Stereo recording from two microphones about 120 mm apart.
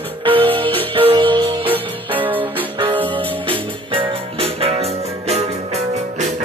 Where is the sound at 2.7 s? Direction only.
45° right (ahead or behind); by 6.4 s 70° right (ahead or behind).